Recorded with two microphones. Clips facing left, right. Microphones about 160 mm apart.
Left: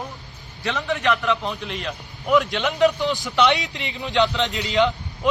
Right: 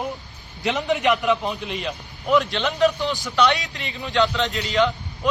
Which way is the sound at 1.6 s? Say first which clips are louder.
Right 1 dB; 5° right (ahead or behind).